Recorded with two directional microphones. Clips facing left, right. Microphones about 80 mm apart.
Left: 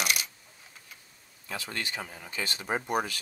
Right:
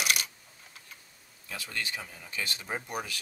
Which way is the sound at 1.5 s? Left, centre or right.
Left.